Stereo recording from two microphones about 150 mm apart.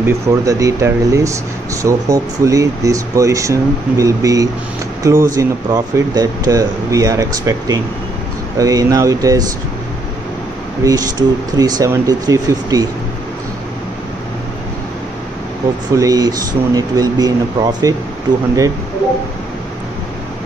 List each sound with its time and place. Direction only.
0.0 s speech: 20° right (ahead or behind)
10.8 s speech: 25° right (ahead or behind)
15.9 s speech: 20° right (ahead or behind)